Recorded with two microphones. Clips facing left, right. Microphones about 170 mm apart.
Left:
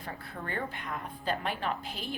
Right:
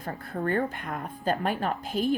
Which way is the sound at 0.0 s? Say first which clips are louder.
Right 9 dB; 45° right (ahead or behind).